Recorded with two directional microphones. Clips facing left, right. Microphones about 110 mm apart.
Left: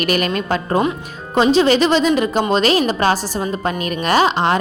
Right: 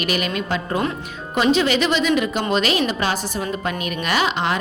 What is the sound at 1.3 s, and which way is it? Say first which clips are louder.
A woman's voice: left 5 dB; 30° left (ahead or behind).